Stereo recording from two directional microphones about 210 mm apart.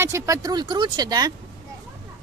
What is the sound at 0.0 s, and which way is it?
Speech, 15° right (ahead or behind).